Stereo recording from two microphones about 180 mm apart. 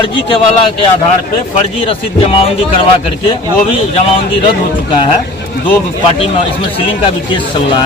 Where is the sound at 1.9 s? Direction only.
30° left (ahead or behind).